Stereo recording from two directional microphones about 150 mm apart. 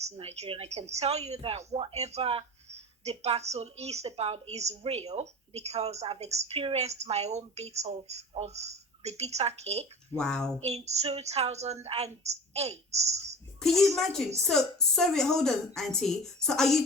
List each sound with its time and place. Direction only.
0.0 s a woman's voice: 45° right (ahead or behind)
10.2 s a woman's voice: 5° left (ahead or behind)
10.6 s a woman's voice: 45° right (ahead or behind)
13.6 s a child's voice: centre (ahead or behind)